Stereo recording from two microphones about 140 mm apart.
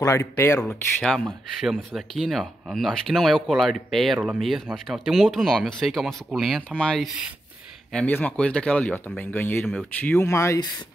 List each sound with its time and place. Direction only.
0.0 s speech: 20° left (ahead or behind)
0.7 s speech: 5° left (ahead or behind); by 10.7 s 20° left (ahead or behind)